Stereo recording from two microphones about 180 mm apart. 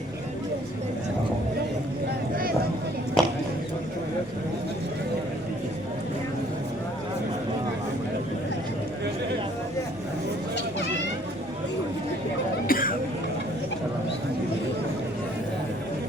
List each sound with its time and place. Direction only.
2.3 s vehicle: 55° right (ahead or behind)
3.2 s a sound: centre (ahead or behind)
12.6 s cough: 50° left (ahead or behind)